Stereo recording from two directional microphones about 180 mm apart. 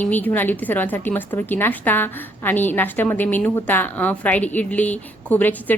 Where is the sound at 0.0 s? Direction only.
10° left (ahead or behind).